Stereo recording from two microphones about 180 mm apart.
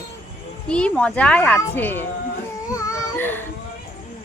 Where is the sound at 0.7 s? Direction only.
5° left (ahead or behind).